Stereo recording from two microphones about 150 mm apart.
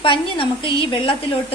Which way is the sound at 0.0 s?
35° left (ahead or behind).